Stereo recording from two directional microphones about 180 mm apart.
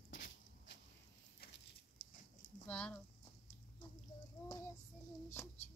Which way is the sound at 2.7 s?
5° left (ahead or behind).